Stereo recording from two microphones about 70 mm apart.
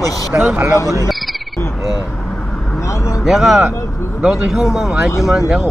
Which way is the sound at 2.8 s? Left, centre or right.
Left.